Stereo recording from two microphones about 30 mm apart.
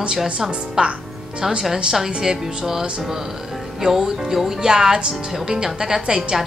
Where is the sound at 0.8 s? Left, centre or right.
Right.